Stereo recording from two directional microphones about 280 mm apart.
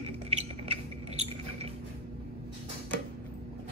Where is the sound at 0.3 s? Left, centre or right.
Right.